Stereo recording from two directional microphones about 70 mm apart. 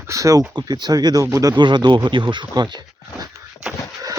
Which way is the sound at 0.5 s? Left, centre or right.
Right.